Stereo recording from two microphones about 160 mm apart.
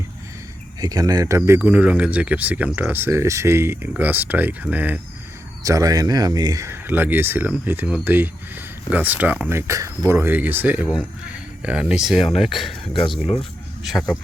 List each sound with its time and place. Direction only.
0.8 s speech: 25° right (ahead or behind)
1.4 s speech: 10° right (ahead or behind)
5.6 s speech: 20° right (ahead or behind); by 12.9 s centre (ahead or behind)